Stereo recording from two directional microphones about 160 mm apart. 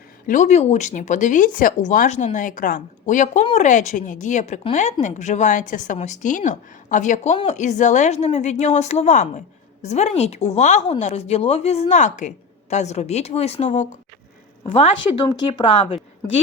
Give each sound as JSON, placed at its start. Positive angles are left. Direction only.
{"t": 0.3, "sound": "speech", "side_deg": 50}
{"t": 15.3, "sound": "speech", "side_deg": 25}